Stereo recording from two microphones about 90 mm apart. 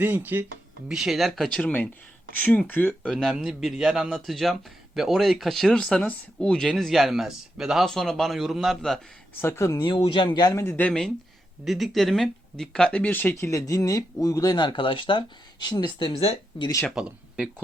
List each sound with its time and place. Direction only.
0.0 s speech: 20° right (ahead or behind)
0.9 s speech: 5° right (ahead or behind)
1.6 s speech: 20° left (ahead or behind)
3.0 s speech: 5° left (ahead or behind)
9.4 s speech: 30° left (ahead or behind)
9.7 s speech: 55° left (ahead or behind)
10.0 s speech: 70° left (ahead or behind)
10.5 s speech: 35° left (ahead or behind)
10.8 s speech: 10° left (ahead or behind)
11.6 s speech: centre (ahead or behind); by 13.3 s 20° left (ahead or behind)
13.5 s speech: 40° left (ahead or behind); by 15.2 s 70° left (ahead or behind)
15.6 s speech: 50° left (ahead or behind)
16.0 s speech: 85° left
16.9 s speech: 10° right (ahead or behind)